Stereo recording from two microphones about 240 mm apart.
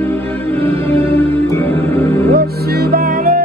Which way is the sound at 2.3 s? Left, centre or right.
Right.